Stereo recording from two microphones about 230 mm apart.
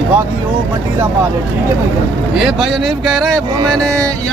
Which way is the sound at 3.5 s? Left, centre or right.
Centre.